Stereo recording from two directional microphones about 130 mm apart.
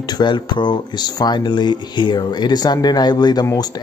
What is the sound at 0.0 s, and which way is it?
Speech, 35° left (ahead or behind).